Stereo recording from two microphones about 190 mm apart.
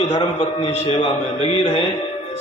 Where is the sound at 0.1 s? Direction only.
25° left (ahead or behind).